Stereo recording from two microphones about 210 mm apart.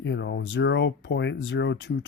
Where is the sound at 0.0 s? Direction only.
60° left (ahead or behind).